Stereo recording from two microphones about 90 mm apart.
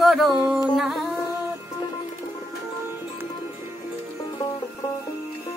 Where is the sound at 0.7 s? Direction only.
Centre (ahead or behind).